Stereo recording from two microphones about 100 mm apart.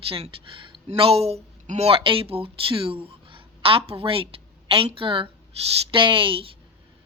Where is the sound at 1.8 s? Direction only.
65° right (ahead or behind).